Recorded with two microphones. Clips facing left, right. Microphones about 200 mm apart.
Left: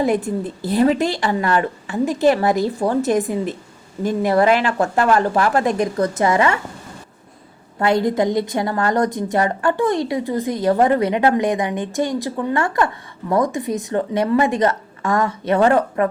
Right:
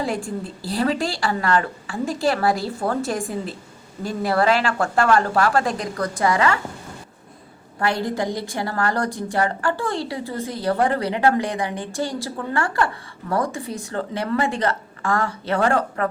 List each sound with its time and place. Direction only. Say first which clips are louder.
0.0 s a woman's voice: left 7 dB; 20° left (ahead or behind)
7.8 s a woman's voice: left 6 dB; 20° left (ahead or behind)